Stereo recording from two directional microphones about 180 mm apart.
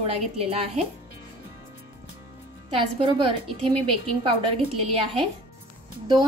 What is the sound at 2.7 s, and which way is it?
A woman's voice, 30° right (ahead or behind).